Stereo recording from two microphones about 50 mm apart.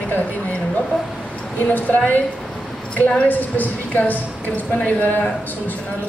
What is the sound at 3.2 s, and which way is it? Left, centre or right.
A man's voice, left.